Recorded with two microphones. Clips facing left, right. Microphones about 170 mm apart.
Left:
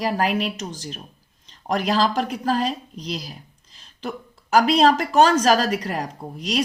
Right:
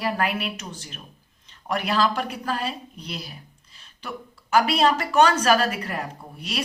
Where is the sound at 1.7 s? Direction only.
35° left (ahead or behind).